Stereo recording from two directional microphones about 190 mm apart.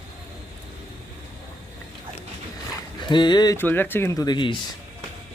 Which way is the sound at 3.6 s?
10° left (ahead or behind).